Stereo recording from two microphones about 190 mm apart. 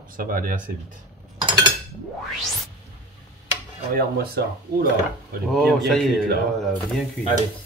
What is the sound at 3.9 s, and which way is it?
Speech, 50° right (ahead or behind).